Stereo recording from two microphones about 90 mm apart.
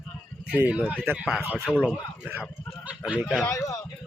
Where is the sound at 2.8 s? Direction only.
15° right (ahead or behind).